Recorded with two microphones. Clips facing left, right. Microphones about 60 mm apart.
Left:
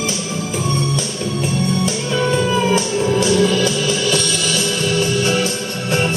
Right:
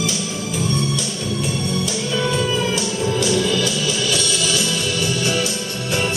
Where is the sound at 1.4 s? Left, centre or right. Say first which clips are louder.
Left 6 dB; left.